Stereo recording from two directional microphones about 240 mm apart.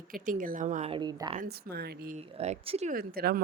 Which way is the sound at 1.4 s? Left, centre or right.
Right.